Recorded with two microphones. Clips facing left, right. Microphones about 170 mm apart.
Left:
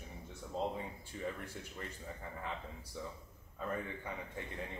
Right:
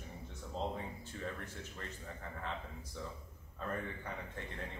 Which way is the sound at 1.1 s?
15° left (ahead or behind).